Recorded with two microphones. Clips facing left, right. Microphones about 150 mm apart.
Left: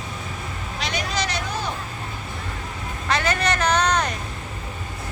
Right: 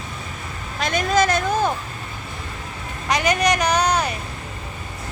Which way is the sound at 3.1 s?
15° right (ahead or behind).